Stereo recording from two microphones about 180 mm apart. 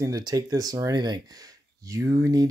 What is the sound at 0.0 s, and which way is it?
Speech, 20° right (ahead or behind).